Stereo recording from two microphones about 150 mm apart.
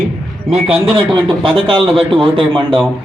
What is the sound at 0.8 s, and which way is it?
Speech, 35° right (ahead or behind).